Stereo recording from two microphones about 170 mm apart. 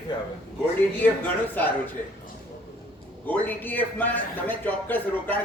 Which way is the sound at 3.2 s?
10° left (ahead or behind).